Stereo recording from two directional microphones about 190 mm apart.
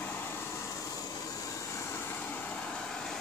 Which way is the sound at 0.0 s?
10° left (ahead or behind).